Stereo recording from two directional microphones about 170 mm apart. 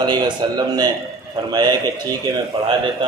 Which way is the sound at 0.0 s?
25° right (ahead or behind).